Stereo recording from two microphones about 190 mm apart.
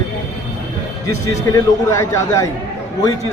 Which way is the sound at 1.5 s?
15° left (ahead or behind).